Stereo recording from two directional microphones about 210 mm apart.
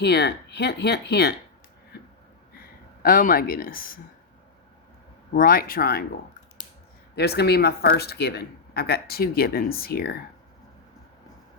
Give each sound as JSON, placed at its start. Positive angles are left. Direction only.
{"t": 0.0, "sound": "speech", "side_deg": 50}
{"t": 1.9, "sound": "a sound", "side_deg": 50}
{"t": 3.0, "sound": "speech", "side_deg": 45}
{"t": 5.3, "sound": "speech", "side_deg": 45}
{"t": 7.2, "sound": "speech", "side_deg": 50}